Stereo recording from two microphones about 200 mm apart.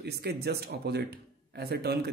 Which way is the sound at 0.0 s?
55° right (ahead or behind).